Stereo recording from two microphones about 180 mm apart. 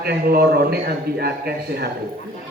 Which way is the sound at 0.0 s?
60° right (ahead or behind).